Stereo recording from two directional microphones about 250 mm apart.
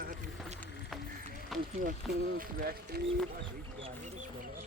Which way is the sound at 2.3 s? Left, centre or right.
Right.